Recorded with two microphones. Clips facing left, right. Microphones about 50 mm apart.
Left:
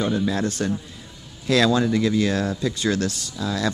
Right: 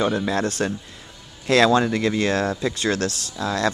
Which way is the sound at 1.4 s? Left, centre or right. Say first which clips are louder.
Right 2 dB; right.